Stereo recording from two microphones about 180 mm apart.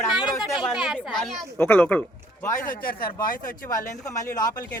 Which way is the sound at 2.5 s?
50° left (ahead or behind).